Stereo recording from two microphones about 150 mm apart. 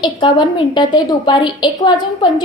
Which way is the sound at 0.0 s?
30° left (ahead or behind).